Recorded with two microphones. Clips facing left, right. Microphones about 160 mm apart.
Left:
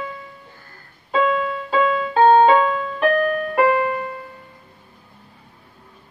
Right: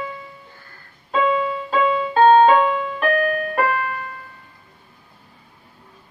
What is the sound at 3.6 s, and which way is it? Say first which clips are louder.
Music: left 8 dB; 20° left (ahead or behind).